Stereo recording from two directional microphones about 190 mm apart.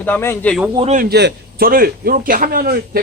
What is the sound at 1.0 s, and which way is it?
A man's voice, 55° right (ahead or behind).